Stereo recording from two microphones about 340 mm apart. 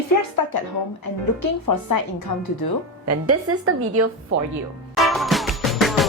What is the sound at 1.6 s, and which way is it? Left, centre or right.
Speech, left.